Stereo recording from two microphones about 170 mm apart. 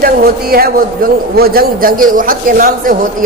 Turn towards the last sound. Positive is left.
turn(degrees=-55)  # may be behind; listen again after turning